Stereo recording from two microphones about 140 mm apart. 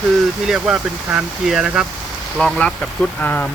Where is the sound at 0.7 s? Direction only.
5° right (ahead or behind).